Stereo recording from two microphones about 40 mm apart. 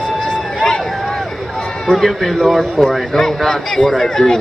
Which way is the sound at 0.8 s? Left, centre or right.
Centre.